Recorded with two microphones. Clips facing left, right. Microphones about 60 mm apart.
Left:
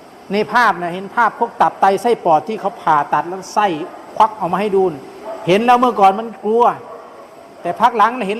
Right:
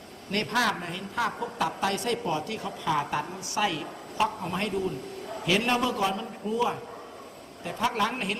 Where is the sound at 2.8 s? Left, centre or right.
Left.